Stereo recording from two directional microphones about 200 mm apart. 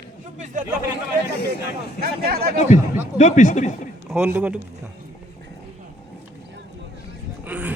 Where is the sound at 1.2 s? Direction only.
50° left (ahead or behind).